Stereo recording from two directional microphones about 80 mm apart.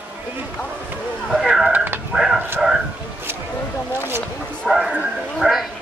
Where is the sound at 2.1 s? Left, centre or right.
Centre.